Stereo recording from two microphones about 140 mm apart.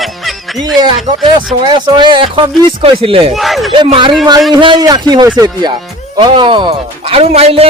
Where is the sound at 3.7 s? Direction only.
35° right (ahead or behind).